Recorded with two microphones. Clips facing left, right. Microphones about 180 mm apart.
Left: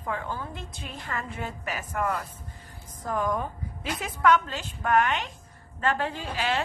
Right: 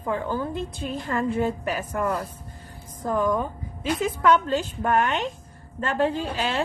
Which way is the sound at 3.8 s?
30° right (ahead or behind).